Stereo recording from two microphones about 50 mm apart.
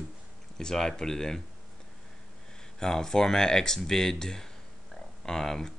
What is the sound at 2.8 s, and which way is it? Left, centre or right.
Speech, centre.